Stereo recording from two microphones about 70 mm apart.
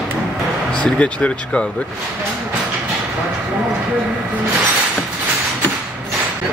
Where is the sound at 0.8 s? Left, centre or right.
Centre.